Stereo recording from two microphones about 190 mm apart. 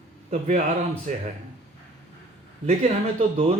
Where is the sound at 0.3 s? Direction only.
40° right (ahead or behind).